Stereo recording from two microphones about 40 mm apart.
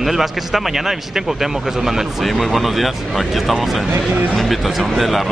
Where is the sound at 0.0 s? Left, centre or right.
Centre.